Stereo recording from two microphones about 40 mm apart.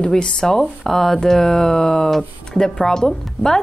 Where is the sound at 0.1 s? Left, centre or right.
Centre.